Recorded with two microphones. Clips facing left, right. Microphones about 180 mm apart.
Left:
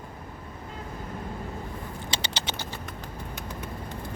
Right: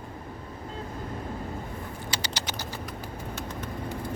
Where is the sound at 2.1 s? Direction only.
25° left (ahead or behind).